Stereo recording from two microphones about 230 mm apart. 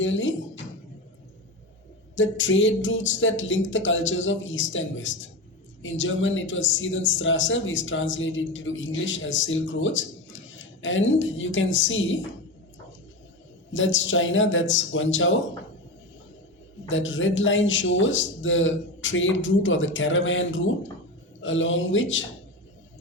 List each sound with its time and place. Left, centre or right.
0.0 s speech: left
2.1 s a man's voice: left
13.7 s a man's voice: left
16.9 s a man's voice: left